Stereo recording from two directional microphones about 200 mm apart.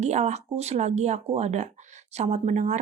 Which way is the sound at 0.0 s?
35° right (ahead or behind).